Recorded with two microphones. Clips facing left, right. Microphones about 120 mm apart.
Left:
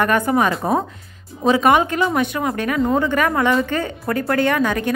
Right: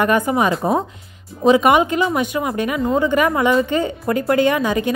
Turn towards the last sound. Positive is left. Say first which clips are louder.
# right 1 dB
turn(degrees=-10)  # may be behind; listen again after turning